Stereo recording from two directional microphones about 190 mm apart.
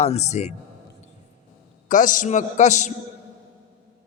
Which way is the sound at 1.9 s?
45° left (ahead or behind).